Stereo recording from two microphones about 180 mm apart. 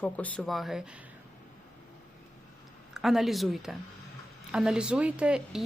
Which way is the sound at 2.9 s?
Centre (ahead or behind).